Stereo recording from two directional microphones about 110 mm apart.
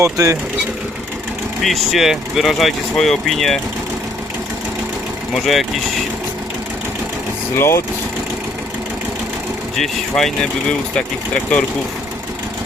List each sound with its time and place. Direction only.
0.0 s speech: 30° right (ahead or behind)
1.6 s speech: centre (ahead or behind)
5.3 s speech: centre (ahead or behind)
7.6 s speech: 25° left (ahead or behind)
9.7 s speech: 5° left (ahead or behind)